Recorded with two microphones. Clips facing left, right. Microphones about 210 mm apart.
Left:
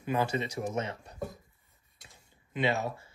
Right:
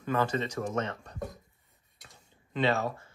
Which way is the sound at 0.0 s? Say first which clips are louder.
Right 1 dB; 10° left (ahead or behind).